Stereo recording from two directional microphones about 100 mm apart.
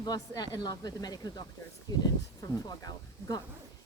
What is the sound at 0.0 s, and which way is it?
Speech, 45° left (ahead or behind).